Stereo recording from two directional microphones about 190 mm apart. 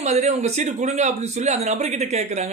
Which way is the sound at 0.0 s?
35° right (ahead or behind).